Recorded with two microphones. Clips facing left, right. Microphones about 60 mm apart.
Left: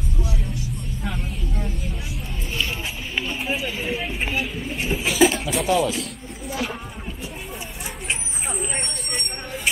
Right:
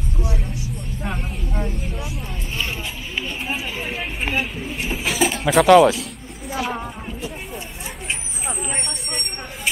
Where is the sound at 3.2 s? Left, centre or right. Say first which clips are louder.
Left 1 dB; centre.